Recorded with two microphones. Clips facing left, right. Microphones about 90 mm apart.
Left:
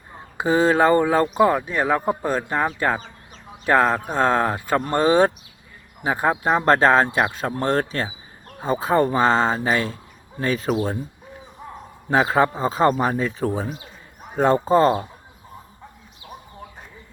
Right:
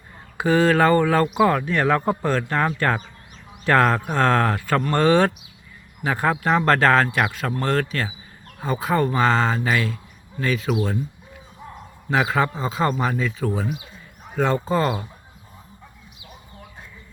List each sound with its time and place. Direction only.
0.1 s a man's voice: 25° left (ahead or behind); by 10.9 s 40° left (ahead or behind)
12.0 s a man's voice: 35° left (ahead or behind)